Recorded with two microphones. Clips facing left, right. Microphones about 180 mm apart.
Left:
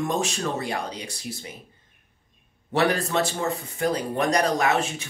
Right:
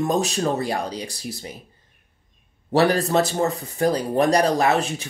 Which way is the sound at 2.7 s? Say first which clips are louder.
Right 4 dB; 35° right (ahead or behind).